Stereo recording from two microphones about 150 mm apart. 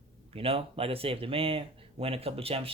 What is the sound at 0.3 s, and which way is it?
Speech, 40° right (ahead or behind).